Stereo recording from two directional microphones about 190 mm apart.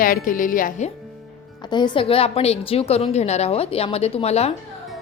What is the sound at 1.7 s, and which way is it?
A woman's voice, 25° left (ahead or behind).